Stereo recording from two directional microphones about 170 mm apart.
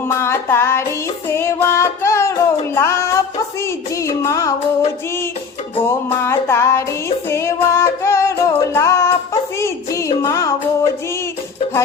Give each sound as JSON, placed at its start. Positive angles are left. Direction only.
{"t": 0.1, "sound": "music", "side_deg": 15}
{"t": 4.0, "sound": "music", "side_deg": 20}
{"t": 5.9, "sound": "music", "side_deg": 15}